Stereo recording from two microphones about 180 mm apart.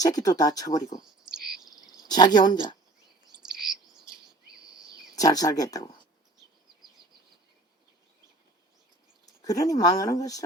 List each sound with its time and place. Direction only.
0.0 s speech: 20° left (ahead or behind)
1.6 s cricket: 20° left (ahead or behind)
5.1 s speech: 20° left (ahead or behind)
9.2 s speech: 20° left (ahead or behind)